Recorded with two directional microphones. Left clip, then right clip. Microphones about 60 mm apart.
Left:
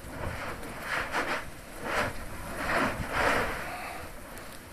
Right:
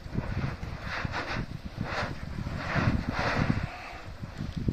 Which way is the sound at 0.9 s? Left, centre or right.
Left.